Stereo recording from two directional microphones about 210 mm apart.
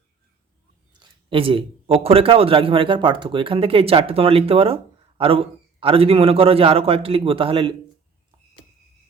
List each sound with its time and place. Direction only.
0.9 s a man's voice: 25° right (ahead or behind)